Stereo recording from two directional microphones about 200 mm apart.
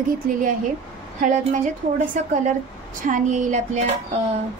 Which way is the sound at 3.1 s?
40° right (ahead or behind).